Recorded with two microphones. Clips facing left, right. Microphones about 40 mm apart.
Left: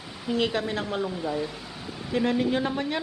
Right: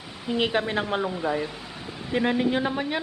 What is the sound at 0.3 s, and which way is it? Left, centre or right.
A man's voice, right.